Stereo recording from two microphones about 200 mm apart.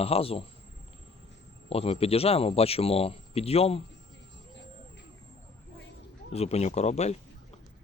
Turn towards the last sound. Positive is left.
turn(degrees=35)  # may be behind; listen again after turning